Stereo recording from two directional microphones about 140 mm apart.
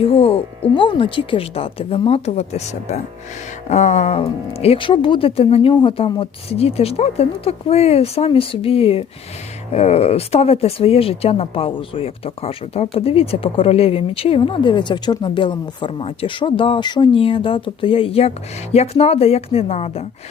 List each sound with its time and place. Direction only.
0.0 s speech: 40° left (ahead or behind)